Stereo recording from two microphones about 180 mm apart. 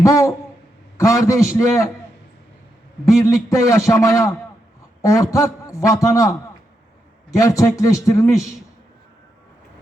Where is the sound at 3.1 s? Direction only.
15° left (ahead or behind).